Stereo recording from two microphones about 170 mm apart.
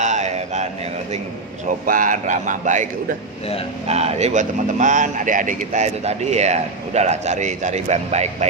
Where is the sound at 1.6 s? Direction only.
50° right (ahead or behind).